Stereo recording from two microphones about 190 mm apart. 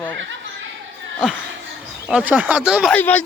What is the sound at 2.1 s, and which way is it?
Speech, 5° right (ahead or behind).